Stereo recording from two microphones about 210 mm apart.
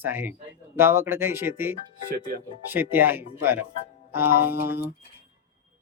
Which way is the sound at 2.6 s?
10° right (ahead or behind).